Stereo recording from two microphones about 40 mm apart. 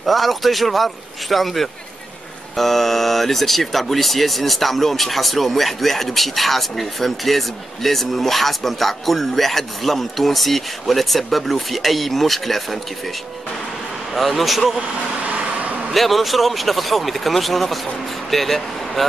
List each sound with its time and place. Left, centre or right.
0.0 s speech: centre
14.1 s speech: centre
15.2 s vehicle: right
15.9 s speech: centre